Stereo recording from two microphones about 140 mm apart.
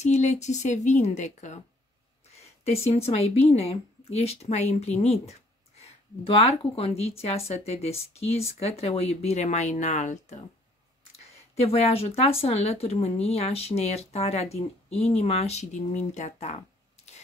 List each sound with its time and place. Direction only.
0.0 s a woman's voice: 55° left (ahead or behind)
2.3 s a sound: 50° left (ahead or behind)
3.1 s speech: 45° left (ahead or behind)
6.6 s speech: 45° left (ahead or behind)
11.3 s speech: 45° left (ahead or behind)